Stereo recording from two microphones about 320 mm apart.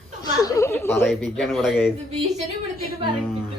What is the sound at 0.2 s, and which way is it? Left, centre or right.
Speech, centre.